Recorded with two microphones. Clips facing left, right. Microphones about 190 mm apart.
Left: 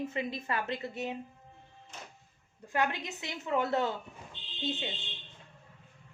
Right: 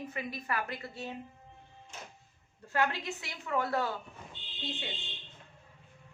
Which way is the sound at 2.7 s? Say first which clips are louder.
Even; 20° left (ahead or behind).